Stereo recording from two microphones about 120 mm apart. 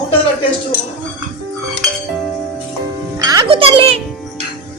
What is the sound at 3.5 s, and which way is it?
Speech, 50° right (ahead or behind).